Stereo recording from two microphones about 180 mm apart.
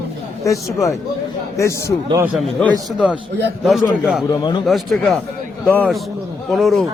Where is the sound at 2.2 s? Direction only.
5° right (ahead or behind).